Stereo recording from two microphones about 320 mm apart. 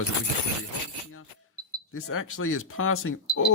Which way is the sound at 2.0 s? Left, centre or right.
Left.